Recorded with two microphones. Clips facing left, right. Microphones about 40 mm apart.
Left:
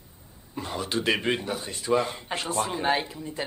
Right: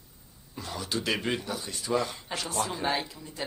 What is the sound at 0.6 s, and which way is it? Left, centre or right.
Speech, left.